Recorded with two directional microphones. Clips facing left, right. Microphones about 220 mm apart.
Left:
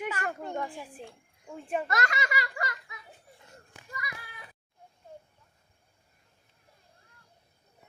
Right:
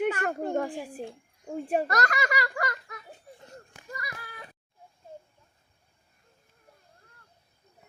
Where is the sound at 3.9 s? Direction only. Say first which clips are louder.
Right 2 dB; 45° right (ahead or behind).